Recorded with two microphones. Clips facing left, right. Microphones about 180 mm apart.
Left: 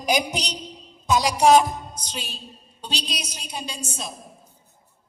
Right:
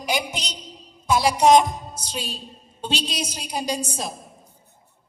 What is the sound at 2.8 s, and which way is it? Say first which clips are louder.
A woman's voice: right 5 dB; 25° right (ahead or behind).